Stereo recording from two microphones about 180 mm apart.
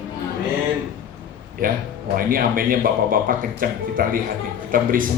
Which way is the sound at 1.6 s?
50° right (ahead or behind).